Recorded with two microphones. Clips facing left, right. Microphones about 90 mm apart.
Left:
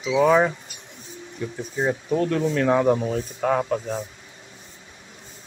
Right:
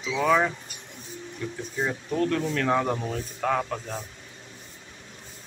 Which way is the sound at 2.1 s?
20° left (ahead or behind).